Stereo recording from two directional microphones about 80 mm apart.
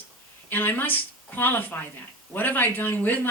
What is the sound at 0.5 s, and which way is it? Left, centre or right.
Speech, left.